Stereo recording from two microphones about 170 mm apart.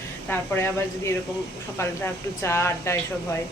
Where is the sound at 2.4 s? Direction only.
15° left (ahead or behind).